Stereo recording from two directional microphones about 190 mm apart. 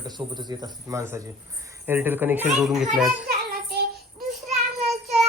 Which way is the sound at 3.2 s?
50° right (ahead or behind).